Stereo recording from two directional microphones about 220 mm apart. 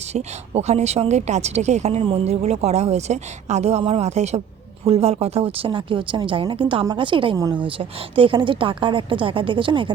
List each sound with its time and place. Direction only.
0.1 s a woman's voice: 30° right (ahead or behind); by 7.7 s 10° right (ahead or behind)
7.8 s a woman's voice: 25° right (ahead or behind)